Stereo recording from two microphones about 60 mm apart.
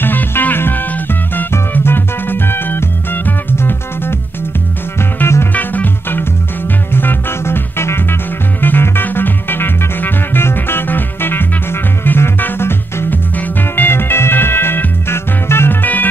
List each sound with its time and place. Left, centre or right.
0.0 s music: left
5.2 s music: left
5.5 s music: left